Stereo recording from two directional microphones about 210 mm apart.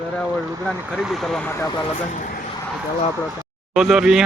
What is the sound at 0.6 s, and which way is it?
Speech, centre (ahead or behind).